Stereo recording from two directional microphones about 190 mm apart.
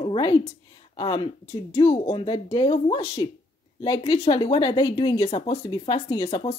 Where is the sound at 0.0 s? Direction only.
25° left (ahead or behind).